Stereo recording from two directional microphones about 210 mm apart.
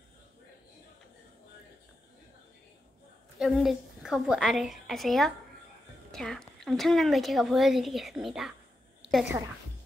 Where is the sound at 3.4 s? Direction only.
Centre (ahead or behind).